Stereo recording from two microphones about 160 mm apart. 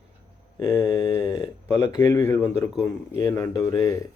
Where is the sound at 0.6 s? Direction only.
20° left (ahead or behind).